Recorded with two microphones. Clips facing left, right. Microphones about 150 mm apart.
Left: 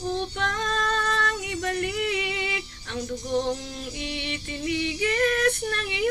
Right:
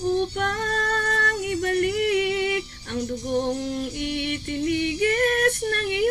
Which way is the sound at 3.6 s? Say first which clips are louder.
Right 7 dB; 55° right (ahead or behind).